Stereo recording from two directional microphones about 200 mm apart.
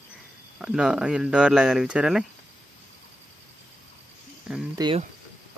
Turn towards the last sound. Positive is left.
turn(degrees=-25)  # may be behind; listen again after turning